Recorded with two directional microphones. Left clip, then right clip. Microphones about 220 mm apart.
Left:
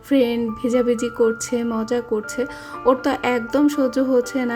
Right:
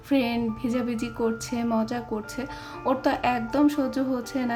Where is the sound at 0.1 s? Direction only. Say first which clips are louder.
Left 7 dB; 20° left (ahead or behind).